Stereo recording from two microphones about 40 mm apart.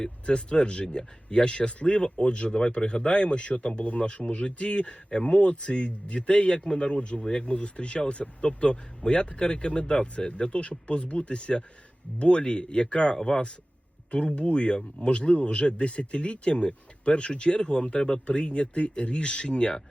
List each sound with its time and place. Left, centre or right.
0.0 s speech: left